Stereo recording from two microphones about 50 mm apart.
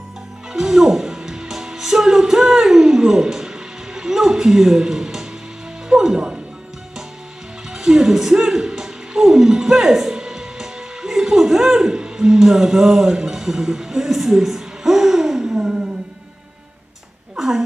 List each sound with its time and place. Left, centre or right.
0.5 s speech: centre
3.9 s a sound: centre
5.9 s music: centre
7.7 s music: centre
15.5 s music: centre
17.4 s a sound: centre